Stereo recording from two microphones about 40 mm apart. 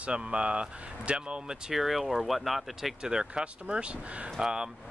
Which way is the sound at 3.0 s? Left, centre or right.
Centre.